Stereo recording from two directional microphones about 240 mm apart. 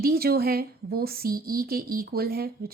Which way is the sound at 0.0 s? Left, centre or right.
Right.